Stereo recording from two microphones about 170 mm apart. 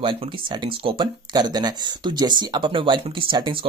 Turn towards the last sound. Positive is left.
turn(degrees=-30)  # may be behind; listen again after turning